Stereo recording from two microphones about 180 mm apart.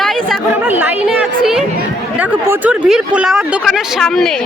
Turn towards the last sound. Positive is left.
turn(degrees=0)  # may be behind; listen again after turning